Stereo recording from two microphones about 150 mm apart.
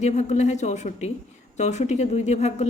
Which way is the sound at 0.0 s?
50° left (ahead or behind).